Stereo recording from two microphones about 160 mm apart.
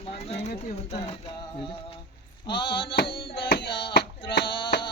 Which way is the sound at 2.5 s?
30° left (ahead or behind).